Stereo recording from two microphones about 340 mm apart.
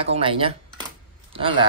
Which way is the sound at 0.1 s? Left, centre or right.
Centre.